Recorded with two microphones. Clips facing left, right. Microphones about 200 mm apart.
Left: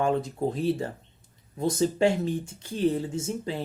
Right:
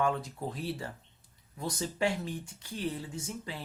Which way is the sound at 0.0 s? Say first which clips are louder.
Left 6 dB; 25° left (ahead or behind).